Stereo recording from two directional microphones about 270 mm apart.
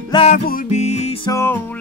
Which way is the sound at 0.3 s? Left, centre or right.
Left.